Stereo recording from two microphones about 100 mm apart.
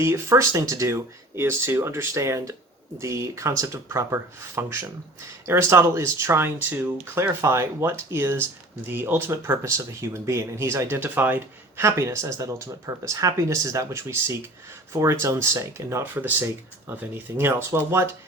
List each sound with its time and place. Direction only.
0.0 s speech: 30° right (ahead or behind)